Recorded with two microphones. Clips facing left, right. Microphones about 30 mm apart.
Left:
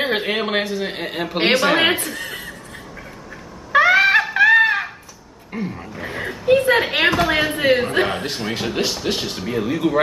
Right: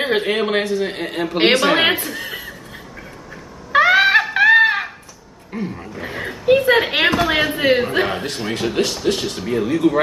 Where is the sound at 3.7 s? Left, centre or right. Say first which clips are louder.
Right 1 dB; centre.